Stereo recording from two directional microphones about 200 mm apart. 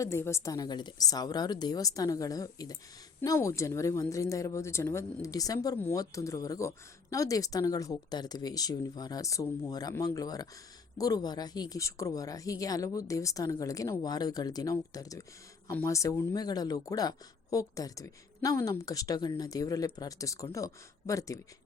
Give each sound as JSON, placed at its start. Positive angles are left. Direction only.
{"t": 0.0, "sound": "a woman's voice", "side_deg": 15}